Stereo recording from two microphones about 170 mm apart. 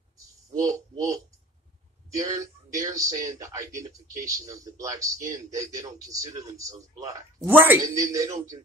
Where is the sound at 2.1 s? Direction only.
20° right (ahead or behind).